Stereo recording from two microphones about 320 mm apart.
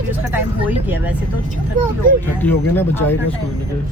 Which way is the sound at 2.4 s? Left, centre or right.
Centre.